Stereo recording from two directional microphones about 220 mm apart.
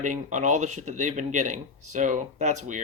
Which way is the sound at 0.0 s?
35° right (ahead or behind).